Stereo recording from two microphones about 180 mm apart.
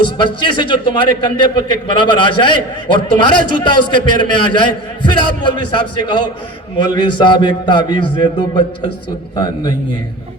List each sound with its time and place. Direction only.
0.2 s a man's voice: 25° left (ahead or behind)